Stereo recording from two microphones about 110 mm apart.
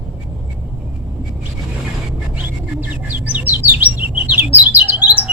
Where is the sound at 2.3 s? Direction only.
15° right (ahead or behind).